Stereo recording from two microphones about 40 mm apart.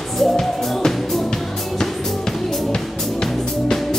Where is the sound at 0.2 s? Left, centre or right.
Centre.